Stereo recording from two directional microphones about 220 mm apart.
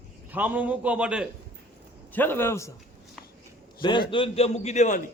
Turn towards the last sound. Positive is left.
turn(degrees=35)  # may be behind; listen again after turning